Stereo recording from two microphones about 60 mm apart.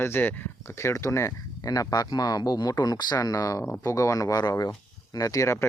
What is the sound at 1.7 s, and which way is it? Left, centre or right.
Speech, left.